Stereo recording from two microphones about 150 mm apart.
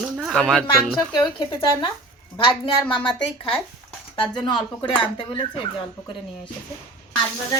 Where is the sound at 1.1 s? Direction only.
30° left (ahead or behind).